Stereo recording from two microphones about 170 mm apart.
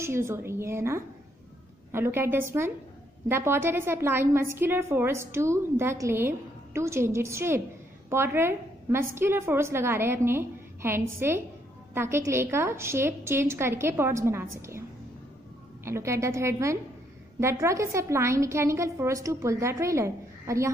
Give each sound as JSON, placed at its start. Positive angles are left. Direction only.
{"t": 0.0, "sound": "a woman's voice", "side_deg": -15}